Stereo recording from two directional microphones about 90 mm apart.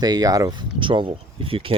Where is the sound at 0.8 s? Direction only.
65° right (ahead or behind); by 1.7 s 90° right.